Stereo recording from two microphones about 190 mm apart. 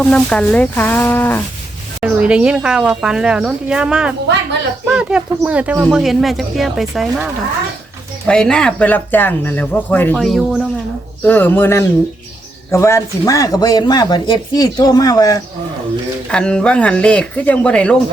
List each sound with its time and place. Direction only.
0.0 s speech: 5° left (ahead or behind)
2.0 s speech: 5° right (ahead or behind)
8.3 s speech: 5° left (ahead or behind)
11.2 s speech: 10° left (ahead or behind)
16.3 s speech: 5° left (ahead or behind)